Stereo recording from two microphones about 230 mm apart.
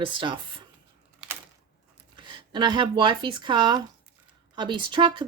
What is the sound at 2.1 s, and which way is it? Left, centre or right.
Speech, right.